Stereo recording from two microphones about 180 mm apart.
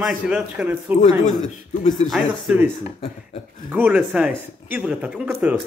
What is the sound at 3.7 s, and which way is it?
A man's voice, 10° right (ahead or behind).